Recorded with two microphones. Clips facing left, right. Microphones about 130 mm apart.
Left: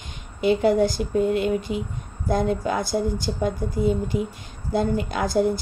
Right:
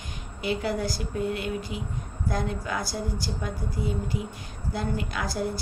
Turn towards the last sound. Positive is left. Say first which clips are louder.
# left 8 dB
turn(degrees=20)  # may be behind; listen again after turning